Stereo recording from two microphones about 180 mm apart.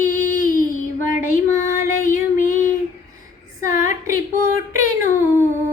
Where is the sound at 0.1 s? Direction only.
45° left (ahead or behind).